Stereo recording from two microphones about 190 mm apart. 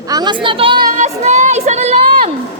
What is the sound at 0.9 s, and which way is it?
Speech, 40° right (ahead or behind).